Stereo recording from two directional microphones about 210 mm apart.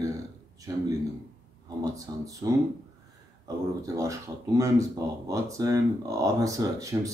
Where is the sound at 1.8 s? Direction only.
15° right (ahead or behind).